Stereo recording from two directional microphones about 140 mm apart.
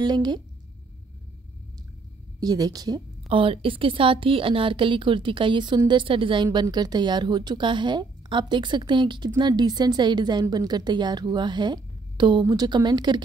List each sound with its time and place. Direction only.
0.0 s a woman's voice: 30° right (ahead or behind)
2.4 s speech: 25° right (ahead or behind)
3.3 s a woman's voice: 40° right (ahead or behind)